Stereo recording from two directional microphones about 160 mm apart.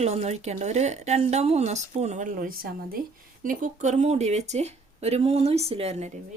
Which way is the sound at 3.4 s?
50° right (ahead or behind).